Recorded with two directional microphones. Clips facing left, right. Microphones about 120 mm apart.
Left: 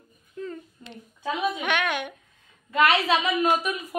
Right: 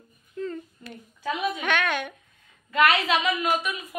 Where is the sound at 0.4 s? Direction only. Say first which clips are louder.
Right 3 dB; 15° left (ahead or behind).